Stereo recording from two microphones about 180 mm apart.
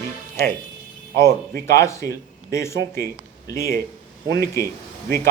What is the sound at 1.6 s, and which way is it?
Speech, 15° left (ahead or behind).